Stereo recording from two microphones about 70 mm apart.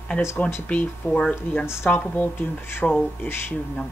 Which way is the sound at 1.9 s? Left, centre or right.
Left.